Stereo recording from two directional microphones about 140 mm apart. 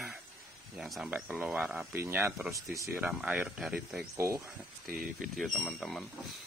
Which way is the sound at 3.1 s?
5° right (ahead or behind).